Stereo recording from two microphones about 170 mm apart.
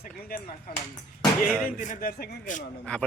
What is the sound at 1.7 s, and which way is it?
Speech, 50° left (ahead or behind).